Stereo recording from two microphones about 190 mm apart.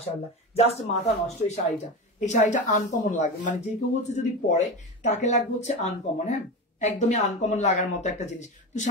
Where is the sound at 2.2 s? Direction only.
40° left (ahead or behind).